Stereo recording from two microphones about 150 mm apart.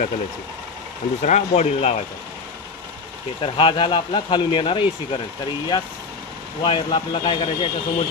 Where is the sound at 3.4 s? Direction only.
35° left (ahead or behind).